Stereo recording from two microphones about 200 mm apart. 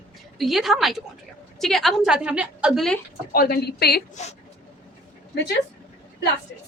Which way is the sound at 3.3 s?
50° left (ahead or behind).